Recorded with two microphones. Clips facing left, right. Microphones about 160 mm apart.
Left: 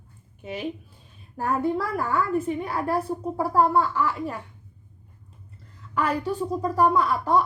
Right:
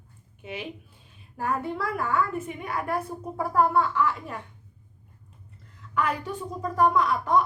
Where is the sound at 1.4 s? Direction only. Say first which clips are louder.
Left 4 dB; 35° left (ahead or behind).